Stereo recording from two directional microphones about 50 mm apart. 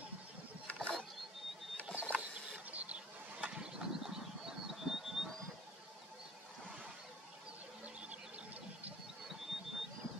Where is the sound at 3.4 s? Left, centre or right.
Centre.